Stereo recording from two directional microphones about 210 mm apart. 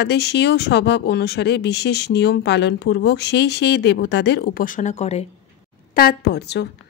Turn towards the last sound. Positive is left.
turn(degrees=50)  # may be behind; listen again after turning